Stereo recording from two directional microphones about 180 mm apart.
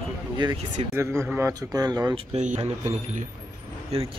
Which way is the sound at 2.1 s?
40° right (ahead or behind).